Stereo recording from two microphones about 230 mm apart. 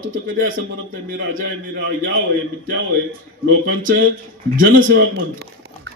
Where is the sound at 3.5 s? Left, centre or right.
Right.